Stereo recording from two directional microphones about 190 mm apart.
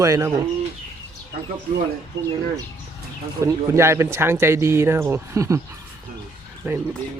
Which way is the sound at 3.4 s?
15° right (ahead or behind).